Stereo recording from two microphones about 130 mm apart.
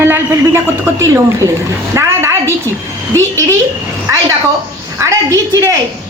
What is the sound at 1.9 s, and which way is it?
Speech, 20° right (ahead or behind).